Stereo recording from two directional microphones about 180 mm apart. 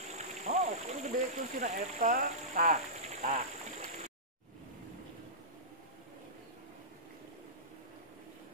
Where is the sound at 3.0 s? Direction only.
35° right (ahead or behind).